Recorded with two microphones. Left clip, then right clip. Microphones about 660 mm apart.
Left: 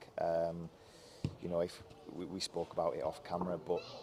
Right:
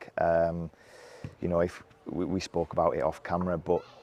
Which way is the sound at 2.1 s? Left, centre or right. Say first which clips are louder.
Right 10 dB; right.